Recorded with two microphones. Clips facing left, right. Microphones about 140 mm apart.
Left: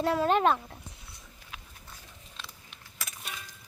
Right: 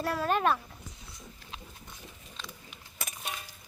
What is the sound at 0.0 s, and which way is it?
Speech, 20° left (ahead or behind).